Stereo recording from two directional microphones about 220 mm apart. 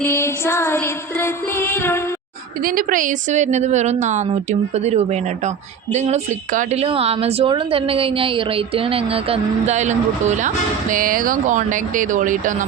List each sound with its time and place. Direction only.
0.0 s a sound: 10° left (ahead or behind)
1.2 s music: 10° left (ahead or behind)
2.6 s a woman's voice: 40° right (ahead or behind)